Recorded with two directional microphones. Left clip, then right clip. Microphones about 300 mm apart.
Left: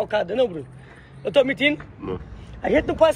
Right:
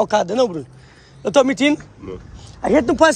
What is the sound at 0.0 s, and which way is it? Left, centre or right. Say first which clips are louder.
Speech: right 5 dB; right.